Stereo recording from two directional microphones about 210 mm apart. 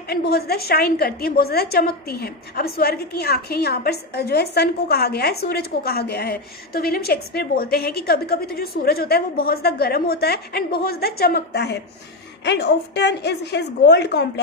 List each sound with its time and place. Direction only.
0.1 s a woman's voice: 50° left (ahead or behind)